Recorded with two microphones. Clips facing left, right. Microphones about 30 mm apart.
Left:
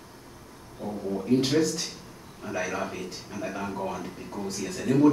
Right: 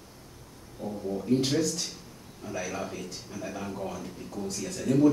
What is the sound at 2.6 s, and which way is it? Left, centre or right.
Speech, centre.